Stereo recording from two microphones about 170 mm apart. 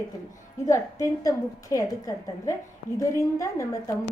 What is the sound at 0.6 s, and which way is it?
A woman's voice, 20° left (ahead or behind).